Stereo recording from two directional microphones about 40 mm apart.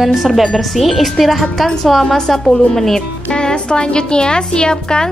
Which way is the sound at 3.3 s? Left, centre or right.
Left.